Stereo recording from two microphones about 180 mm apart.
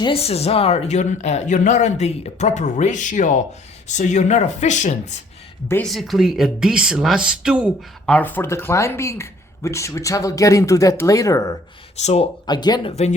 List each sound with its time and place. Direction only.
0.0 s speech: 30° left (ahead or behind)
5.6 s speech: 10° left (ahead or behind)
5.9 s speech: centre (ahead or behind)
8.0 s speech: 10° left (ahead or behind)
11.9 s speech: 35° left (ahead or behind)
12.5 s speech: 25° left (ahead or behind)
12.9 s speech: 35° left (ahead or behind)